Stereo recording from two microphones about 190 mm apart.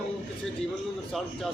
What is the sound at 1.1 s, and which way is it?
Speech, centre (ahead or behind).